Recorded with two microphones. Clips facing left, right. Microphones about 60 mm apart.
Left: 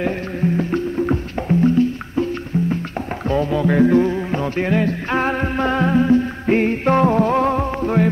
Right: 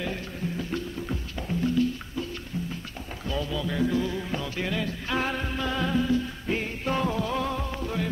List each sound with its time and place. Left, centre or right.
0.0 s music: left
3.3 s music: left